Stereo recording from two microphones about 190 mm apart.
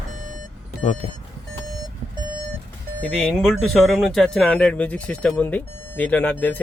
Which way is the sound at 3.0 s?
10° left (ahead or behind).